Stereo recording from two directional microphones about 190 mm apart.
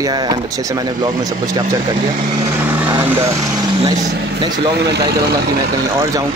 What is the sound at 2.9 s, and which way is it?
Speech, 15° right (ahead or behind).